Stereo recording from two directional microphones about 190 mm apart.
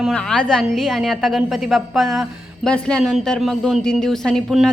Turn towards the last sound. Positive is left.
turn(degrees=0)  # may be behind; listen again after turning